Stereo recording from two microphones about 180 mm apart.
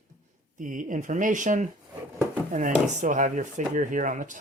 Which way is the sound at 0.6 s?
45° right (ahead or behind).